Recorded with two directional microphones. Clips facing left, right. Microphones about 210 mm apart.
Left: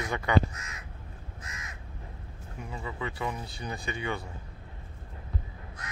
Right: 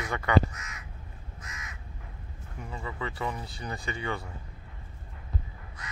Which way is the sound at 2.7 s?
10° left (ahead or behind).